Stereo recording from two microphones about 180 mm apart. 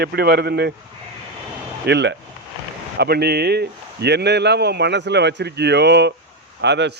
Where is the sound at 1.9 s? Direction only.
70° right (ahead or behind).